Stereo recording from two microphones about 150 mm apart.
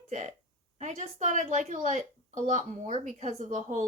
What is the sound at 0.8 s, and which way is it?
A woman's voice, 50° right (ahead or behind).